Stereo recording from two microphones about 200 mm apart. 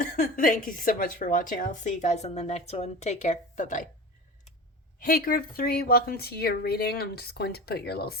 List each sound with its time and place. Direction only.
0.0 s a woman's voice: 40° left (ahead or behind)
4.9 s speech: 45° left (ahead or behind)